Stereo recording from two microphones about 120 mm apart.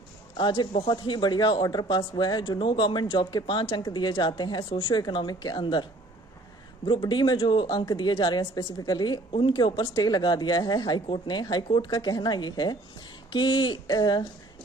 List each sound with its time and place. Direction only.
0.3 s speech: 40° left (ahead or behind)
6.8 s speech: 40° left (ahead or behind)